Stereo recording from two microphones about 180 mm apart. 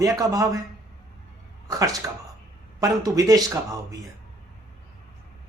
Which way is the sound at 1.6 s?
20° right (ahead or behind).